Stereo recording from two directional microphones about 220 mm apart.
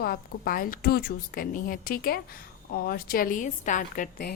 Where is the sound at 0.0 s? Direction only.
40° left (ahead or behind).